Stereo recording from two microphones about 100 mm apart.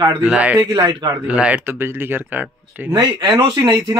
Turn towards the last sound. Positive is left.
turn(degrees=-45)  # may be behind; listen again after turning